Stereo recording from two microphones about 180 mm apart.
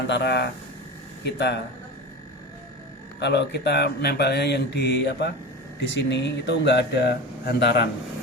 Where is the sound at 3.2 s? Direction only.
70° left (ahead or behind).